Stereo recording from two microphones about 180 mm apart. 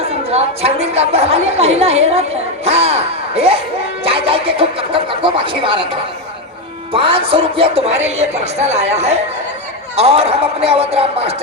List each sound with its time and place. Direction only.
0.3 s speech: 35° right (ahead or behind)